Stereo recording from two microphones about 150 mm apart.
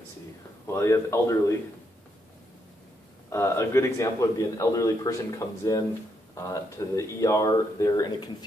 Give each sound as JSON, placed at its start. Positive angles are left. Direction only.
{"t": 0.7, "sound": "a man's voice", "side_deg": 20}
{"t": 3.3, "sound": "a man's voice", "side_deg": 15}